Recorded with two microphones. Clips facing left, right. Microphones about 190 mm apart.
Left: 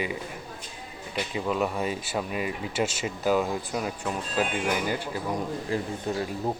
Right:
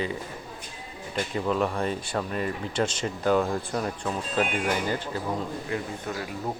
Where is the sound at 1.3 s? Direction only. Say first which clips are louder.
Right 1 dB; 5° left (ahead or behind).